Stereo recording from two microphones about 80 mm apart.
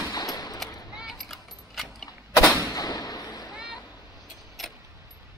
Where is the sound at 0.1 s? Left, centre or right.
Left.